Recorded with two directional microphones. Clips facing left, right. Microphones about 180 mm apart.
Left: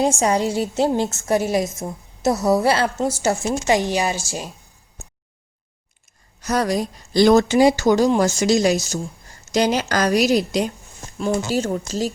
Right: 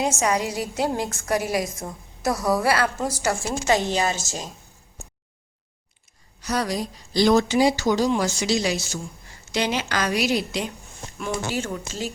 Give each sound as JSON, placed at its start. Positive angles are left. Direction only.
{"t": 0.0, "sound": "a woman's voice", "side_deg": 30}
{"t": 6.4, "sound": "speech", "side_deg": 45}